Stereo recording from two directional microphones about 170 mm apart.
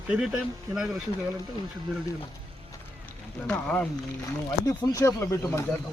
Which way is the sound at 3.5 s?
5° left (ahead or behind).